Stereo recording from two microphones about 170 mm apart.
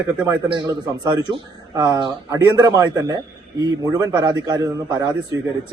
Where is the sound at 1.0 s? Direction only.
25° right (ahead or behind).